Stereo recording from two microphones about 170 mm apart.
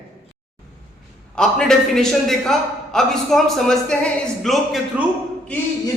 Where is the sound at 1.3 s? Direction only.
5° left (ahead or behind).